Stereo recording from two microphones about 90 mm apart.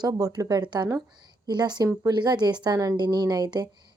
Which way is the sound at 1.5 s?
50° right (ahead or behind).